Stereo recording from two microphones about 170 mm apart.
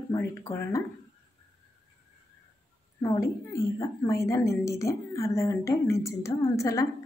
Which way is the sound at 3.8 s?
20° left (ahead or behind).